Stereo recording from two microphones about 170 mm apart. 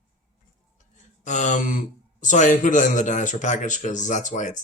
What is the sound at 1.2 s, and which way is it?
Speech, 45° left (ahead or behind).